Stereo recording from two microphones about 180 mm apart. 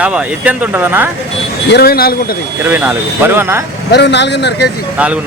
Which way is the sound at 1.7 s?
60° left (ahead or behind).